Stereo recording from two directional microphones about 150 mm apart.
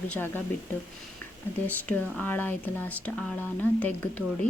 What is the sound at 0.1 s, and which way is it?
Speech, 10° left (ahead or behind).